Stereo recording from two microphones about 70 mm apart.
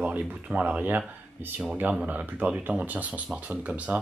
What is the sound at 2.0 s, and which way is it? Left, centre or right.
Speech, right.